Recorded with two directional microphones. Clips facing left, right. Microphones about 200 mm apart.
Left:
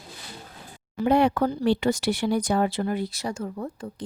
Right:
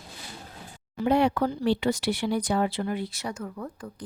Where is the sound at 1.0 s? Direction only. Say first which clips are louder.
Left 2 dB; 50° left (ahead or behind).